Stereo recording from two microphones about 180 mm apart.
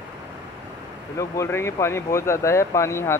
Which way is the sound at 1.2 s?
15° left (ahead or behind).